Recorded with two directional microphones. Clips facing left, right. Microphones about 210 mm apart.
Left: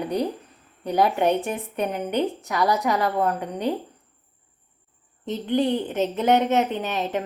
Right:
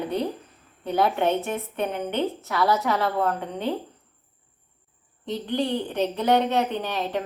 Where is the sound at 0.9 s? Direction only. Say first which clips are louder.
Left 2 dB; 15° left (ahead or behind).